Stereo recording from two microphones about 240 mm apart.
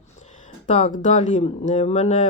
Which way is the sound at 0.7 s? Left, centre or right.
Left.